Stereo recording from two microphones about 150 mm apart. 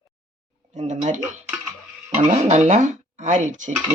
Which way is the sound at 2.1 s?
50° right (ahead or behind).